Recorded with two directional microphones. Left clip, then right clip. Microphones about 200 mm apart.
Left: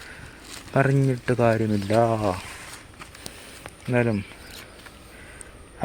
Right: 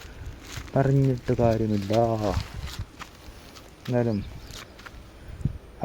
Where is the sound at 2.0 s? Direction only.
10° left (ahead or behind).